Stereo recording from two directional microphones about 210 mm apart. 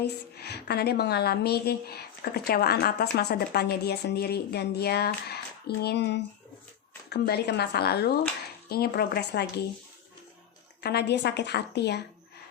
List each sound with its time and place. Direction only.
0.0 s a woman's voice: 50° left (ahead or behind)
10.8 s a woman's voice: 55° left (ahead or behind)